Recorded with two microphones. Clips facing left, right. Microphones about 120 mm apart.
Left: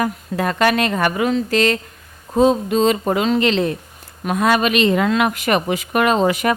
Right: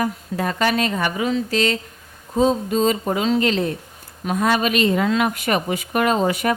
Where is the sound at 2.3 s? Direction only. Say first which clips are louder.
Left 3 dB; 70° left (ahead or behind).